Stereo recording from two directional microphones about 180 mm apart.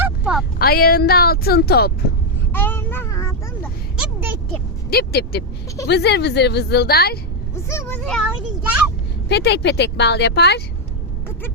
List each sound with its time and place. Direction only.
0.0 s a sound: 5° right (ahead or behind)
0.6 s speech: 55° left (ahead or behind)
2.5 s speech: 10° left (ahead or behind)
4.9 s a woman's voice: 60° left (ahead or behind)
7.5 s vehicle: 15° left (ahead or behind)
8.0 s speech: centre (ahead or behind)
9.3 s a woman's voice: 70° left (ahead or behind)